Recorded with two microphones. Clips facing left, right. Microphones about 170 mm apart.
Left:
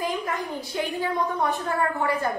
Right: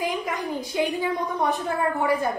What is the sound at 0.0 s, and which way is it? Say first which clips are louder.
A woman's voice: right 1 dB; 10° right (ahead or behind).